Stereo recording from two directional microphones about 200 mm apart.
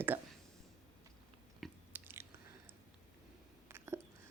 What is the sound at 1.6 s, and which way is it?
Chewing, 10° right (ahead or behind).